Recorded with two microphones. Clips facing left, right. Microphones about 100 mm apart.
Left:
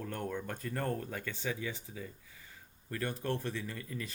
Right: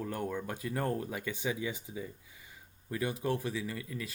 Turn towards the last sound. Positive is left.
turn(degrees=0)  # may be behind; listen again after turning